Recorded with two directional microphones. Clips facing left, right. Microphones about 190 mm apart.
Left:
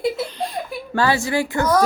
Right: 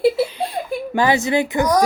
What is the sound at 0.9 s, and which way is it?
Speech, 20° right (ahead or behind).